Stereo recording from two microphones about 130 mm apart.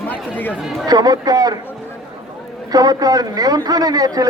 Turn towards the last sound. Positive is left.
turn(degrees=-30)  # may be behind; listen again after turning